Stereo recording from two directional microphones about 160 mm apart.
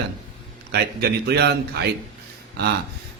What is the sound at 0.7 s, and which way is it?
Speech, 85° right.